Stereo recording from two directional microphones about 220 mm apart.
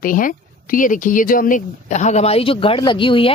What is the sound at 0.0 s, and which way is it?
Speech, 40° left (ahead or behind).